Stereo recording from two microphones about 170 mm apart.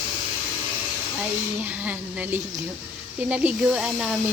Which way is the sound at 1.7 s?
10° right (ahead or behind).